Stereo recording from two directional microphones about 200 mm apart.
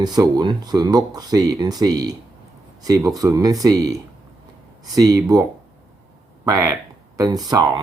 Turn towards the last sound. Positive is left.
turn(degrees=-20)  # may be behind; listen again after turning